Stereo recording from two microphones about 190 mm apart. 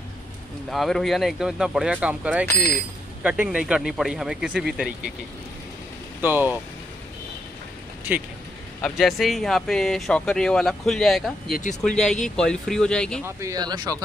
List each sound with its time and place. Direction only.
0.7 s speech: centre (ahead or behind)
6.2 s speech: 10° right (ahead or behind)
8.8 s speech: centre (ahead or behind)
13.2 s speech: 15° right (ahead or behind)